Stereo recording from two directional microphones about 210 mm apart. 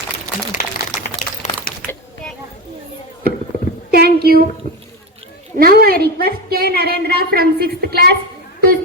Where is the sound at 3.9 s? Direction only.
50° right (ahead or behind).